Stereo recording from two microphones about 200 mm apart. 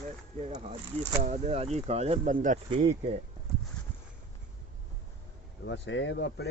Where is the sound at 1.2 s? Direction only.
30° right (ahead or behind).